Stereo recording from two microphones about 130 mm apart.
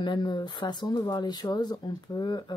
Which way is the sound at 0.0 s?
35° left (ahead or behind).